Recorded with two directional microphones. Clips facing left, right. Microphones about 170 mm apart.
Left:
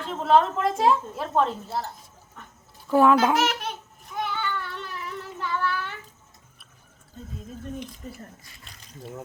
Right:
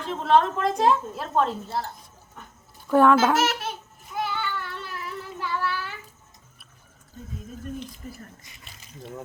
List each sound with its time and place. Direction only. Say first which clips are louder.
0.0 s a woman's voice: even; centre (ahead or behind)
2.9 s babbling: right 1 dB; centre (ahead or behind)
8.4 s speech: even; 20° right (ahead or behind)
8.6 s speech: left 1 dB; centre (ahead or behind)